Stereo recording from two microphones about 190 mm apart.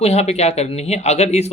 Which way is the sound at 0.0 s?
35° left (ahead or behind).